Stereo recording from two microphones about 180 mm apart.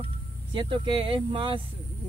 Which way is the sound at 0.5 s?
30° right (ahead or behind).